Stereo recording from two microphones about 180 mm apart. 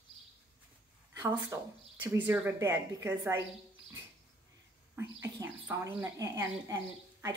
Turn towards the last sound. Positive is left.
turn(degrees=-15)  # may be behind; listen again after turning